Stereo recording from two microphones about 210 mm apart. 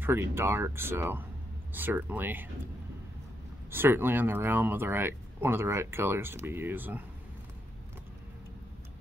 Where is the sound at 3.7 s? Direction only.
10° right (ahead or behind).